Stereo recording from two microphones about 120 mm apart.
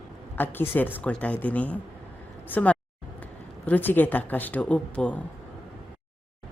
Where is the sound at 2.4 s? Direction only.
15° left (ahead or behind).